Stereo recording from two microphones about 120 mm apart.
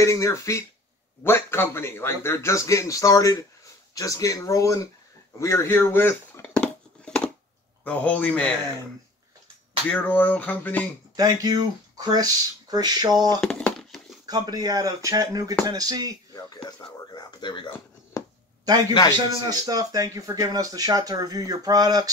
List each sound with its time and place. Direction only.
0.0 s speech: 25° left (ahead or behind)
5.4 s a sound: 25° left (ahead or behind)
7.8 s speech: 15° left (ahead or behind)
9.8 s speech: 15° left (ahead or behind)
11.1 s speech: 30° right (ahead or behind)
13.4 s a sound: 10° left (ahead or behind)
14.2 s speech: 35° right (ahead or behind)
16.6 s speech: 35° left (ahead or behind)
19.5 s speech: 30° right (ahead or behind)